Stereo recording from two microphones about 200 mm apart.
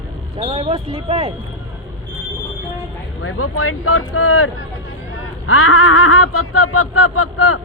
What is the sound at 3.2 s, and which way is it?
Speech, 90° left.